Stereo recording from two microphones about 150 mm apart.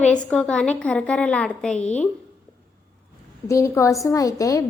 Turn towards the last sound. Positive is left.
turn(degrees=20)  # may be behind; listen again after turning